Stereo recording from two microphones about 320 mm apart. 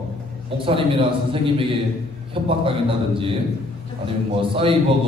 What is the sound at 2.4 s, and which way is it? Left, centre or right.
Speech, centre.